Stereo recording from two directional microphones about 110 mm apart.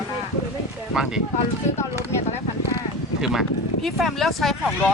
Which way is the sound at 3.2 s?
5° right (ahead or behind).